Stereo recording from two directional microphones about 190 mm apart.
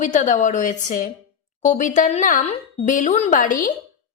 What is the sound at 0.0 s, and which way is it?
A woman's voice, 40° left (ahead or behind).